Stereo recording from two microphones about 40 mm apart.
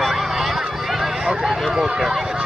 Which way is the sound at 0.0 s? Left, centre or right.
Centre.